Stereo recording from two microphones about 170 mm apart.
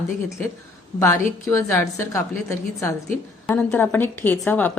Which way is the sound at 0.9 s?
15° left (ahead or behind).